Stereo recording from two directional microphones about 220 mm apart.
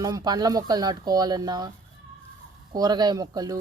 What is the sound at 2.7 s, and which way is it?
Speech, 20° right (ahead or behind).